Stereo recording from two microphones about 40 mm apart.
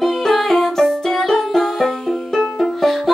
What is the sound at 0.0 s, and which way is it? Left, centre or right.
Music, centre.